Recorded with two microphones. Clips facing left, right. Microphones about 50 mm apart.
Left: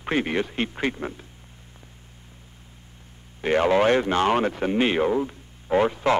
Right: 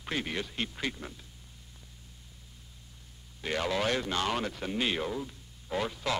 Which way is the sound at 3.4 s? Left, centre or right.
Left.